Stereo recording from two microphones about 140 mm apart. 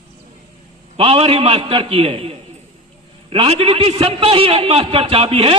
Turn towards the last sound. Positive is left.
turn(degrees=-45)  # may be behind; listen again after turning